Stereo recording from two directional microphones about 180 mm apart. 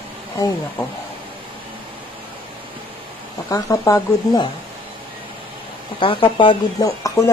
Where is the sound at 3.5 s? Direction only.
15° left (ahead or behind).